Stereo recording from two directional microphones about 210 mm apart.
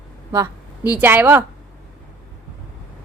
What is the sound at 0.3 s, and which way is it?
Speech, 15° right (ahead or behind).